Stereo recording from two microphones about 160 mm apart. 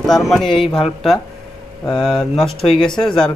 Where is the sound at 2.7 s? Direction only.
30° left (ahead or behind).